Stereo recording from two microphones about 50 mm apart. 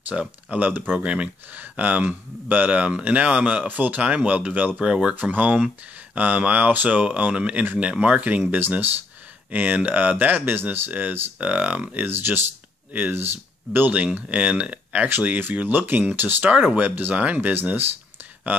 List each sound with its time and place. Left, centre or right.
0.1 s speech: centre
0.6 s speech: right
0.9 s speech: right
3.6 s speech: right
4.7 s speech: centre
5.1 s speech: right
9.5 s speech: right
10.9 s speech: right
12.1 s speech: right
13.8 s speech: right
16.4 s speech: right